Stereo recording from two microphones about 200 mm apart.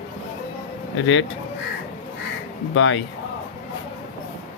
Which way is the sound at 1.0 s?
70° left (ahead or behind).